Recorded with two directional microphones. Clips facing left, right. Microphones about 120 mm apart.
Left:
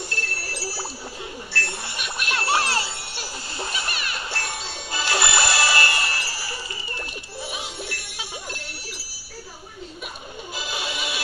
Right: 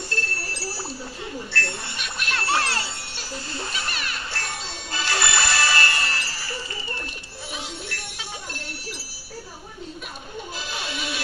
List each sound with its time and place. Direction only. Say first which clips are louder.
0.5 s a sound: even; 10° left (ahead or behind)
7.5 s music: left 1 dB; 10° left (ahead or behind)
10.5 s music: left 3 dB; 10° left (ahead or behind)